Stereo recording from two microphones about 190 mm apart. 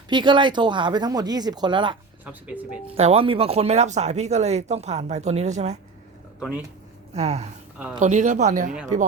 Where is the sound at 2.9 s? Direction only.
30° right (ahead or behind).